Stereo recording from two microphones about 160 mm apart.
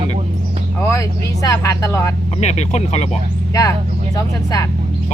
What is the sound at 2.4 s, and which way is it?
Speech, 45° left (ahead or behind).